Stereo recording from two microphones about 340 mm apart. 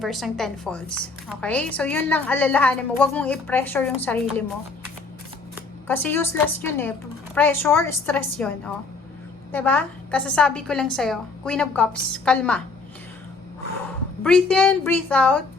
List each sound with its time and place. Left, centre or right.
0.0 s a woman's voice: centre
5.9 s a woman's voice: centre
14.3 s a woman's voice: centre